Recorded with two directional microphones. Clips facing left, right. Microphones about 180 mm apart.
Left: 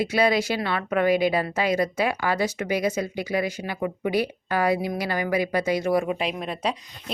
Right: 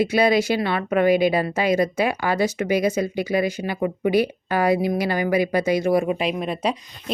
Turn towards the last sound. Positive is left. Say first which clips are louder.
# right 4 dB
turn(degrees=-10)  # may be behind; listen again after turning